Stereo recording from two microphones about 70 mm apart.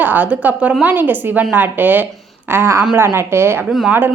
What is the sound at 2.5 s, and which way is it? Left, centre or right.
Speech, right.